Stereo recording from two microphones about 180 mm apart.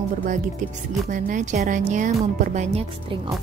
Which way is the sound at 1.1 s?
45° right (ahead or behind).